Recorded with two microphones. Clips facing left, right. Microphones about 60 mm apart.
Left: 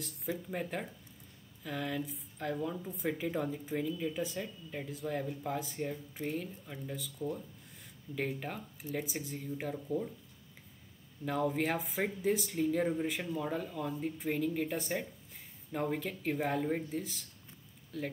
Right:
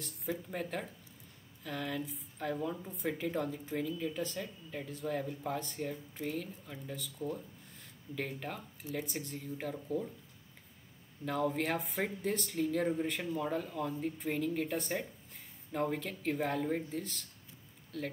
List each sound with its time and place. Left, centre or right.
0.0 s speech: centre
11.2 s speech: centre